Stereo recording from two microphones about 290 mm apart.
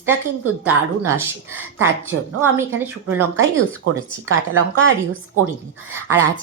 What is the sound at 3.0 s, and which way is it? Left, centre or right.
Speech, right.